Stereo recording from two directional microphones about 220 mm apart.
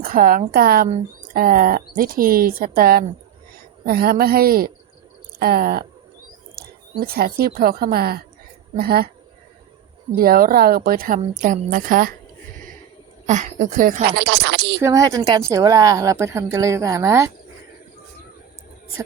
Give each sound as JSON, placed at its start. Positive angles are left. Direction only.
{"t": 0.0, "sound": "a woman's voice", "side_deg": -40}
{"t": 10.1, "sound": "speech", "side_deg": -40}
{"t": 13.2, "sound": "speech", "side_deg": -35}
{"t": 14.8, "sound": "a woman's voice", "side_deg": -15}